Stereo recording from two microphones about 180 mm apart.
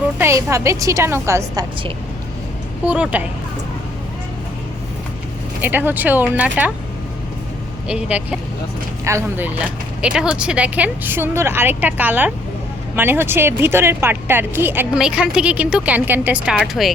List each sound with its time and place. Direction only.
0.2 s speech: 15° right (ahead or behind)
2.8 s speech: 5° right (ahead or behind)
5.6 s speech: 10° right (ahead or behind)
7.9 s speech: 5° right (ahead or behind)
10.0 s speech: 5° right (ahead or behind)